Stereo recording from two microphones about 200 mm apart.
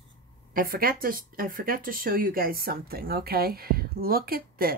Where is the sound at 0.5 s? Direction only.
45° right (ahead or behind).